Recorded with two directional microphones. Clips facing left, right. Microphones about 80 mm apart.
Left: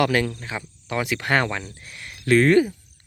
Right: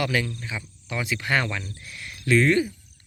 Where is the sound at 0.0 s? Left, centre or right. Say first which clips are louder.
Left 5 dB; left.